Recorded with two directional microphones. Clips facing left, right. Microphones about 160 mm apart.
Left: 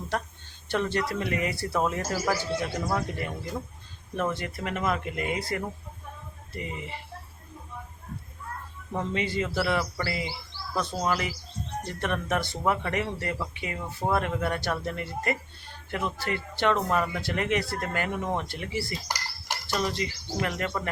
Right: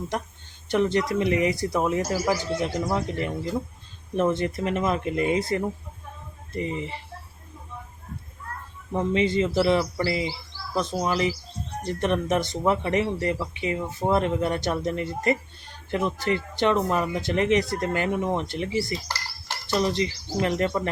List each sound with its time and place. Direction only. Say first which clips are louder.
0.7 s speech: right 5 dB; 15° right (ahead or behind)
9.0 s speech: right 6 dB; 20° right (ahead or behind)
19.0 s dishes: even; 15° left (ahead or behind)
19.6 s speech: right 6 dB; 20° right (ahead or behind)